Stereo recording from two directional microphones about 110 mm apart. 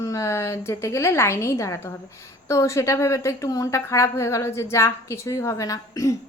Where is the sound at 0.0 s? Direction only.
30° left (ahead or behind).